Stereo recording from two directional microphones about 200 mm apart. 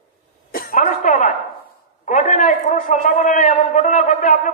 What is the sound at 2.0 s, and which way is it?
A man's voice, 40° left (ahead or behind).